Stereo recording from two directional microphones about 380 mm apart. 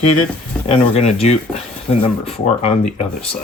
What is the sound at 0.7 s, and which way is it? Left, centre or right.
Speech, centre.